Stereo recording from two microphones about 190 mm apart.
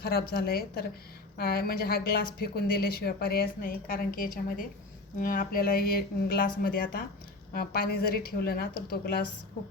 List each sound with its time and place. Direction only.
0.0 s a woman's voice: 55° left (ahead or behind)